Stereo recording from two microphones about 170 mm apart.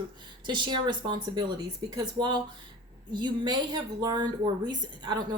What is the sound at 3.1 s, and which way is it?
A woman's voice, 25° right (ahead or behind).